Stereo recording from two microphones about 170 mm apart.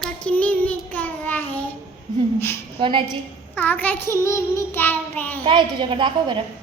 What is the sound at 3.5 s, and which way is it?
Child singing, 10° left (ahead or behind).